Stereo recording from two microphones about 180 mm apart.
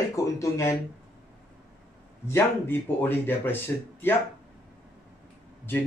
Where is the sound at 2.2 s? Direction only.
10° left (ahead or behind).